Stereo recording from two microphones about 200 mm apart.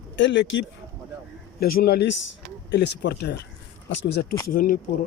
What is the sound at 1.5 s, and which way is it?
Speech, 50° left (ahead or behind).